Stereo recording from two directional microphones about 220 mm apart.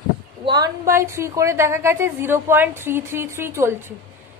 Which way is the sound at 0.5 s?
15° right (ahead or behind).